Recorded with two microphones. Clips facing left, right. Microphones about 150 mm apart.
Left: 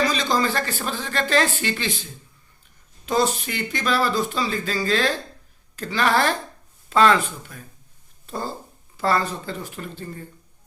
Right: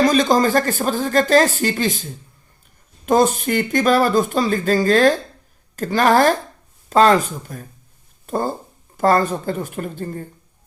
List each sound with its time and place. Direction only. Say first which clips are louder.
0.0 s a woman's voice: right 7 dB; 50° right (ahead or behind)
3.1 s a woman's voice: right 6 dB; 50° right (ahead or behind)